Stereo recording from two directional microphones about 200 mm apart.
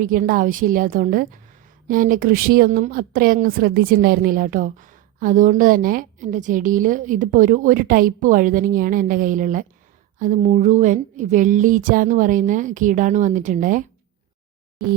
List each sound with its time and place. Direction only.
0.0 s a woman's voice: 45° right (ahead or behind)